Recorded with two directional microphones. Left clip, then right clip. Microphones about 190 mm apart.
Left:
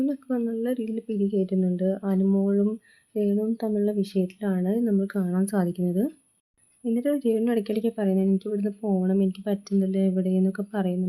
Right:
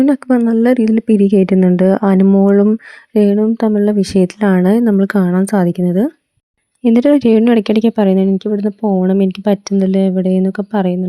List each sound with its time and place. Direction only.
0.0 s speech: 50° right (ahead or behind)
2.2 s speech: 40° right (ahead or behind)
6.8 s speech: 50° right (ahead or behind)